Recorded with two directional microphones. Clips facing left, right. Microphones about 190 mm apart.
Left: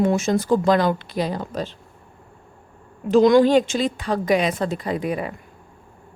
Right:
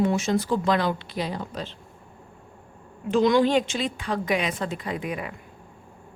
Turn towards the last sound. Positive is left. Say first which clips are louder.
# left 6 dB
turn(degrees=35)  # may be behind; listen again after turning